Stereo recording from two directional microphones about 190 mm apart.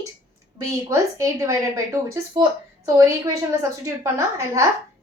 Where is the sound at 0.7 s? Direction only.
15° right (ahead or behind).